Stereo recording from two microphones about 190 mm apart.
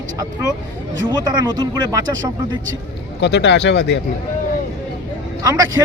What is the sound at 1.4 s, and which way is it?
Speech, 20° right (ahead or behind).